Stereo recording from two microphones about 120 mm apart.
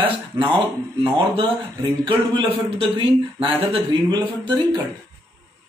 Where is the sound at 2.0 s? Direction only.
50° right (ahead or behind).